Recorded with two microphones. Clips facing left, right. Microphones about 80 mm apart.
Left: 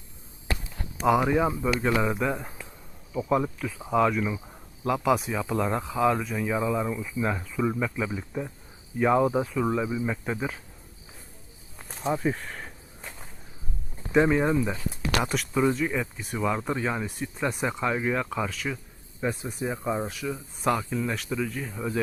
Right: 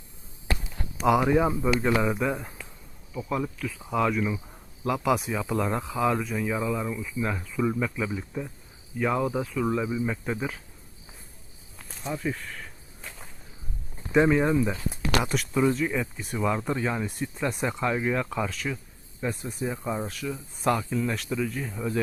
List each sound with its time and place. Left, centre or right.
1.2 s speech: centre
3.2 s speech: centre
12.1 s speech: left
13.0 s walk: centre
14.1 s speech: centre